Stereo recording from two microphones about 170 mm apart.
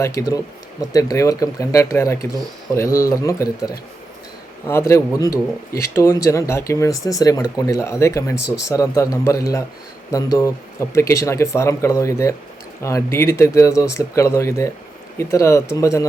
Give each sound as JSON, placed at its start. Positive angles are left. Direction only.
{"t": 0.0, "sound": "a man's voice", "side_deg": 20}